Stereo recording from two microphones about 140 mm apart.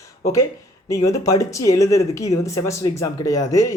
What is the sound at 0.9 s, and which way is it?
Speech, 25° left (ahead or behind).